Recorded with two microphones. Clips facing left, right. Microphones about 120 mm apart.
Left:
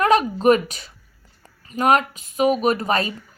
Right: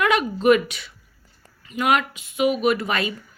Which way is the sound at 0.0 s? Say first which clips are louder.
Left 3 dB; 40° left (ahead or behind).